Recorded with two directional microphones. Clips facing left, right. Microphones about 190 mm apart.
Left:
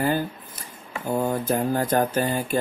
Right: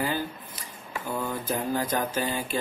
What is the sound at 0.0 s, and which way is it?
Speech, 50° left (ahead or behind).